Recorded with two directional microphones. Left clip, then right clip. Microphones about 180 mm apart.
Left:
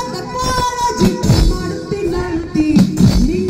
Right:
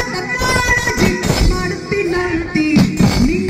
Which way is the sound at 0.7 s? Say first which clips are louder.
Even; 50° left (ahead or behind).